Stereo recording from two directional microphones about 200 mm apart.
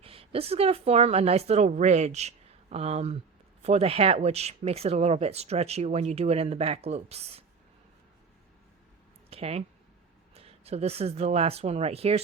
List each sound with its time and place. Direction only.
0.0 s speech: 30° right (ahead or behind)
9.3 s speech: 30° right (ahead or behind)